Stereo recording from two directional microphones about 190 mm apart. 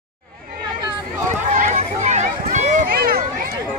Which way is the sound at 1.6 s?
40° right (ahead or behind).